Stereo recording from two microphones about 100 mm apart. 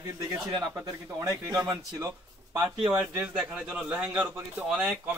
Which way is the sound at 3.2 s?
15° right (ahead or behind).